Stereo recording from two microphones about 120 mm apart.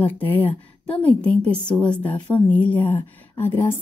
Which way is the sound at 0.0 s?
15° left (ahead or behind).